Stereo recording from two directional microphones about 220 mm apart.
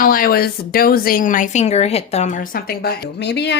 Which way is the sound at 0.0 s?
40° left (ahead or behind).